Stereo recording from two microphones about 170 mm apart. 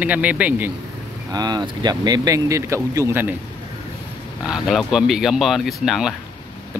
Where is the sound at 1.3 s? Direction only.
25° right (ahead or behind).